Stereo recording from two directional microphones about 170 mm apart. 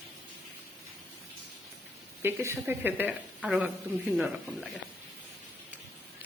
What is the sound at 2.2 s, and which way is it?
Speech, 15° right (ahead or behind).